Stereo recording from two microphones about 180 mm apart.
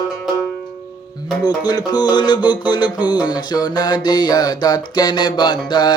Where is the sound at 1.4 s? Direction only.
20° left (ahead or behind).